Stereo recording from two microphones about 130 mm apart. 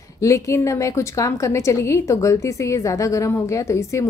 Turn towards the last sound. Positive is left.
turn(degrees=20)  # may be behind; listen again after turning